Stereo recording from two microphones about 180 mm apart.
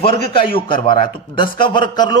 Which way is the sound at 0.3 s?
30° left (ahead or behind).